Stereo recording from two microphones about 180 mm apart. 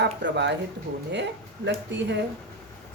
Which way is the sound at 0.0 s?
75° right (ahead or behind).